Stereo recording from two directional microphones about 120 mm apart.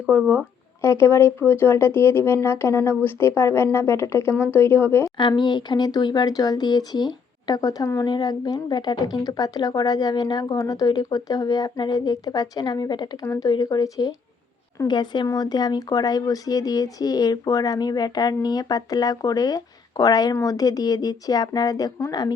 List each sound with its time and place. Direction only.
0.2 s speech: 10° right (ahead or behind)
0.8 s speech: 20° left (ahead or behind)
5.4 s speech: 40° left (ahead or behind)
13.2 s speech: 25° left (ahead or behind)